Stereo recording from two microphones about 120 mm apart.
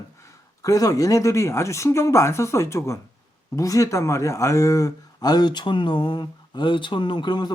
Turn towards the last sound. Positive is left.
turn(degrees=40)  # may be behind; listen again after turning